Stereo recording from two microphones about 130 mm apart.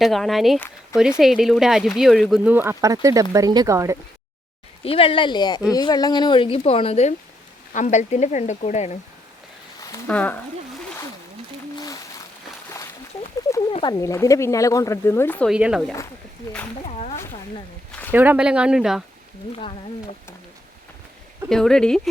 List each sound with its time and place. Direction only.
0.0 s speech: centre (ahead or behind)
2.3 s speech: 10° right (ahead or behind)
4.8 s speech: 45° left (ahead or behind)
7.7 s speech: 70° left (ahead or behind)
10.1 s speech: 10° left (ahead or behind)
13.8 s speech: 25° left (ahead or behind)
15.4 s speech: 5° right (ahead or behind)
18.1 s speech: 15° right (ahead or behind)
19.5 s speech: 50° left (ahead or behind)
21.5 s speech: 5° left (ahead or behind)